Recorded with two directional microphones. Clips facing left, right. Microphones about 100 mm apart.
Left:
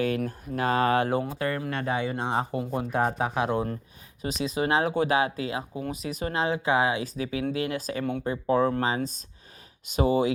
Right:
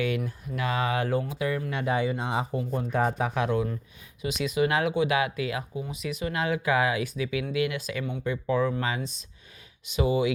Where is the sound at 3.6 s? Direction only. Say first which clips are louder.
Even; 45° left (ahead or behind).